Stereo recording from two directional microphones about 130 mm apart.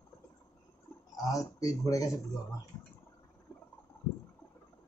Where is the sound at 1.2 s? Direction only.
25° left (ahead or behind).